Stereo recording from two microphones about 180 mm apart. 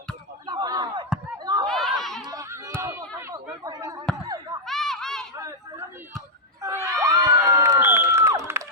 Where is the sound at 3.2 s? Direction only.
15° right (ahead or behind).